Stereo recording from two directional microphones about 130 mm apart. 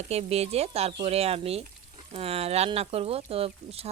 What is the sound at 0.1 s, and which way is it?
Speech, 55° right (ahead or behind).